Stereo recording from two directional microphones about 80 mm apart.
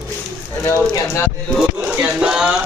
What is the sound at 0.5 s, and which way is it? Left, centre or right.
Speech, left.